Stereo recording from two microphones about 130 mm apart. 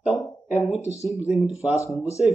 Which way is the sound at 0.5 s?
60° left (ahead or behind).